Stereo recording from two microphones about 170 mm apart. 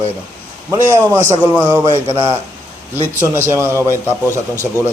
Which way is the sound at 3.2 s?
15° right (ahead or behind).